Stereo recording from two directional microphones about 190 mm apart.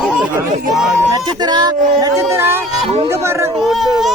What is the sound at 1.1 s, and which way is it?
Speech, 20° right (ahead or behind).